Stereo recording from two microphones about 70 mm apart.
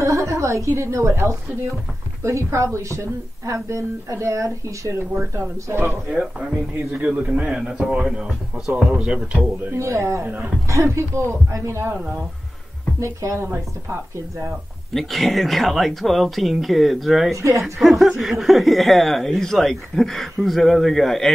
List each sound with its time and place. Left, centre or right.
0.0 s a woman's voice: right
5.3 s speech: right
5.9 s a man's voice: centre
9.8 s speech: right
13.0 s speech: right
15.0 s speech: centre